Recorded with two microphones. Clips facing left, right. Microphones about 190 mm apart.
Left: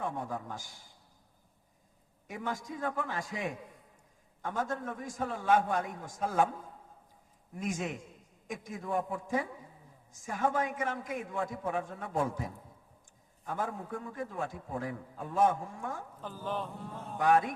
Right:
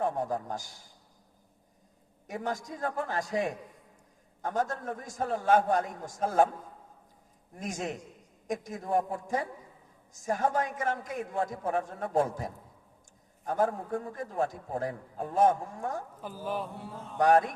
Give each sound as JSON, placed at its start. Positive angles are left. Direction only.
{"t": 0.0, "sound": "a man's voice", "side_deg": -40}
{"t": 2.2, "sound": "a man's voice", "side_deg": -40}
{"t": 7.6, "sound": "a man's voice", "side_deg": -40}
{"t": 16.2, "sound": "speech", "side_deg": -10}
{"t": 17.2, "sound": "a man's voice", "side_deg": -40}